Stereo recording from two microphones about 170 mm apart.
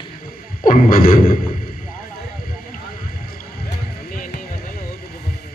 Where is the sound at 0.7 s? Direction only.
55° left (ahead or behind).